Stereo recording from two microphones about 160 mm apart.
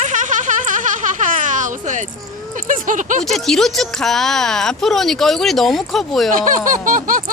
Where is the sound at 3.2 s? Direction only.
Centre (ahead or behind).